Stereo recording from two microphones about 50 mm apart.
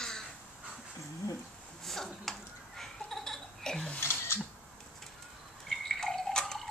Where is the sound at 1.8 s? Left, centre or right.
Centre.